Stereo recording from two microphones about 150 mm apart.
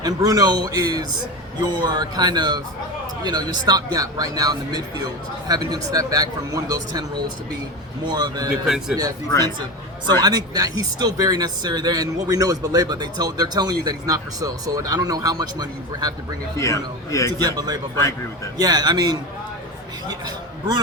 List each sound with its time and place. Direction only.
0.0 s speech: 25° right (ahead or behind)
8.0 s speech: 30° right (ahead or behind)
8.6 s a man's voice: 5° right (ahead or behind)
10.2 s speech: 25° right (ahead or behind)
16.6 s a man's voice: 20° left (ahead or behind)
17.3 s speech: 25° right (ahead or behind)